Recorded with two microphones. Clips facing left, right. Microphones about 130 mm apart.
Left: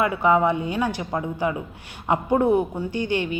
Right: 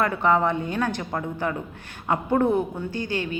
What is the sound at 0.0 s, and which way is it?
A woman's voice, 10° left (ahead or behind).